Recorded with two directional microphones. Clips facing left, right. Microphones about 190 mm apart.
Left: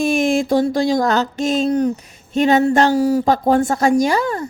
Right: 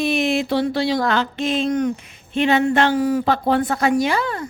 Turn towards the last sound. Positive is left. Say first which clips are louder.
# left 3 dB
turn(degrees=40)  # may be behind; listen again after turning